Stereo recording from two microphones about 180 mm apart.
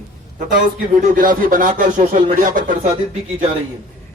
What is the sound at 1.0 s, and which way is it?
Speech, 50° right (ahead or behind).